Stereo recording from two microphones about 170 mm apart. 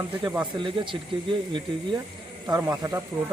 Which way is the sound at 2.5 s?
20° right (ahead or behind).